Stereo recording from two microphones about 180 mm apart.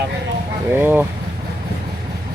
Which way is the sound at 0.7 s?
10° right (ahead or behind).